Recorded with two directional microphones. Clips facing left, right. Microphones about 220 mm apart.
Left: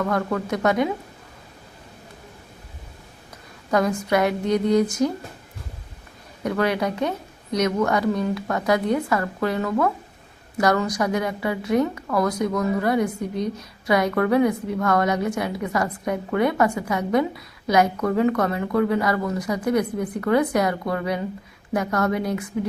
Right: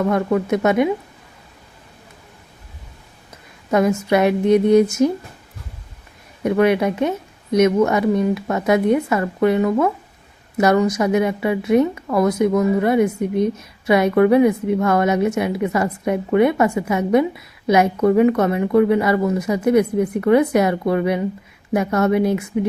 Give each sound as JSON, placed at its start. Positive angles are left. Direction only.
{"t": 0.1, "sound": "a woman's voice", "side_deg": -25}
{"t": 3.7, "sound": "a woman's voice", "side_deg": -25}
{"t": 6.4, "sound": "a woman's voice", "side_deg": -25}